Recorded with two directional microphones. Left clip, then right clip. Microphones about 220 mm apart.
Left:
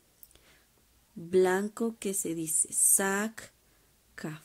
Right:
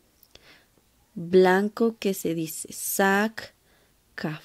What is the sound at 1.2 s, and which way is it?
Speech, 20° right (ahead or behind).